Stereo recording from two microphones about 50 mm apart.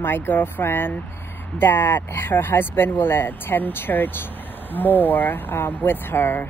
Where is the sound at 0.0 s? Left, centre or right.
Left.